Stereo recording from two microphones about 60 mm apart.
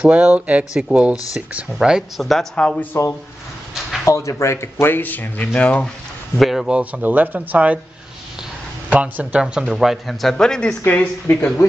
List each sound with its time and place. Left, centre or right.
0.1 s speech: right
2.6 s speech: centre
2.9 s speech: left
5.5 s speech: centre
6.3 s a man's voice: centre
6.7 s speech: right
8.9 s speech: right
9.7 s speech: centre
11.2 s speech: left